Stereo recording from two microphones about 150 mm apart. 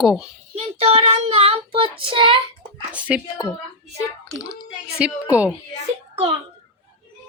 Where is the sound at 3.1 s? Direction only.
5° right (ahead or behind).